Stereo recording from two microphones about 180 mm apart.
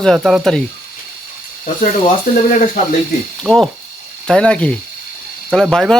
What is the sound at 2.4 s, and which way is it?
Speech, 45° left (ahead or behind).